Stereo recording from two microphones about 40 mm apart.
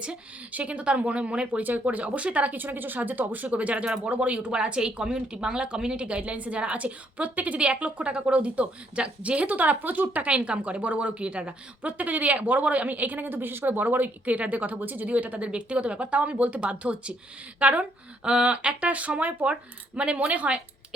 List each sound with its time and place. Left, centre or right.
0.5 s speech: right
1.6 s speech: right
2.6 s speech: right
10.2 s speech: right